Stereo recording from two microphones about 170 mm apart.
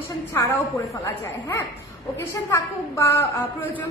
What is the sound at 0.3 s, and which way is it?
A woman's voice, 15° left (ahead or behind).